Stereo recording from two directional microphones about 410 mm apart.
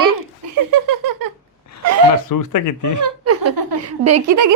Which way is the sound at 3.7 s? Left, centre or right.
Right.